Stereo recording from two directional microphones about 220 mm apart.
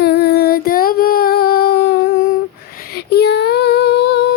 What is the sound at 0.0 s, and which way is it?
Humming, 45° left (ahead or behind).